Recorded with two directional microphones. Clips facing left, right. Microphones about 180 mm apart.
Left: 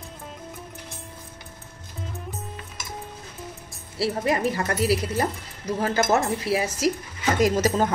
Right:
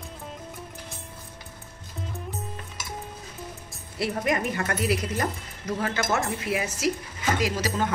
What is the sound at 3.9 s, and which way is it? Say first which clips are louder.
Speech: left 2 dB; 30° left (ahead or behind).